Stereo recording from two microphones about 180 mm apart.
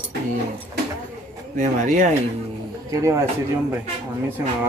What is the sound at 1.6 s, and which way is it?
Speech, 45° right (ahead or behind).